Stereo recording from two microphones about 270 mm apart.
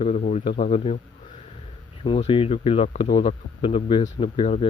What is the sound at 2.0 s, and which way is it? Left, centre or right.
A man's voice, centre.